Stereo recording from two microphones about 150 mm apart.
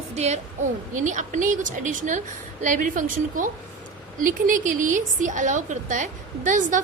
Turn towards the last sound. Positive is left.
turn(degrees=-55)  # may be behind; listen again after turning